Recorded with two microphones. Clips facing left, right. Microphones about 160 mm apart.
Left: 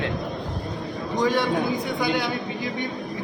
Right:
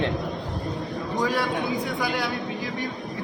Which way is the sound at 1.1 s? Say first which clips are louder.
Left 3 dB; 5° right (ahead or behind).